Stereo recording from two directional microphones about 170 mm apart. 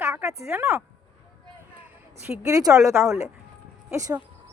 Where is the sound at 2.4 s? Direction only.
20° right (ahead or behind).